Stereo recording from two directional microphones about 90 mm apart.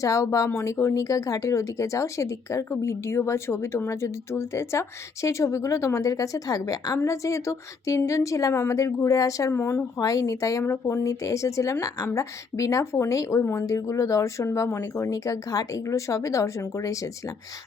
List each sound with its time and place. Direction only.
0.0 s speech: 35° left (ahead or behind)
9.5 s a woman's voice: 25° left (ahead or behind)
10.0 s speech: 40° left (ahead or behind)